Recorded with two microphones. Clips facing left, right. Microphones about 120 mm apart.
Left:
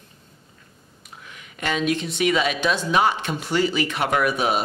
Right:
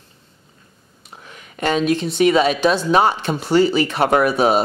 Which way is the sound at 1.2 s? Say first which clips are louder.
Right 7 dB; 35° right (ahead or behind).